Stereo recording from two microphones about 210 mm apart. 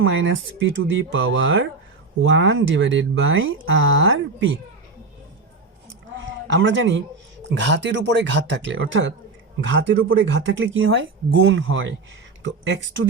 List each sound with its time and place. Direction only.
0.0 s speech: 65° right (ahead or behind)
6.5 s speech: 65° right (ahead or behind)